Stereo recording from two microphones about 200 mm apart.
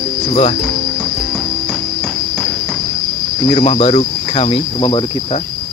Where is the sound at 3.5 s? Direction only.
30° left (ahead or behind).